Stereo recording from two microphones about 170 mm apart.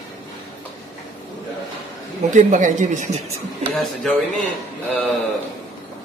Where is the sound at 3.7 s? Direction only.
Centre (ahead or behind).